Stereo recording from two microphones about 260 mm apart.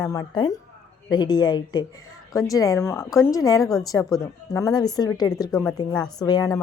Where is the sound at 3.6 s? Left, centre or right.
Centre.